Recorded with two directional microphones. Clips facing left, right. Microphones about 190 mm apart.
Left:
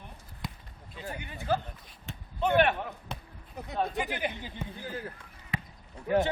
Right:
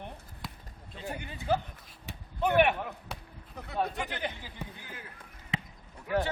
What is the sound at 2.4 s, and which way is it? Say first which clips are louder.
Speech: even; 10° right (ahead or behind).